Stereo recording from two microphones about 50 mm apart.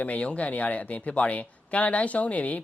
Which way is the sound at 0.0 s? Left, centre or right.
Left.